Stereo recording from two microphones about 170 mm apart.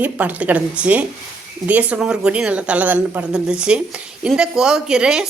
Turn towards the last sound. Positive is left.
turn(degrees=-5)  # may be behind; listen again after turning